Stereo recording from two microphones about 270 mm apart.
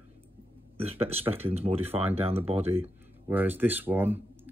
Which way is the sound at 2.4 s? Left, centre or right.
Right.